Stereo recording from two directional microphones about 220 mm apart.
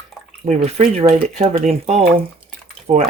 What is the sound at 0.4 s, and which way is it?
Speech, 35° right (ahead or behind).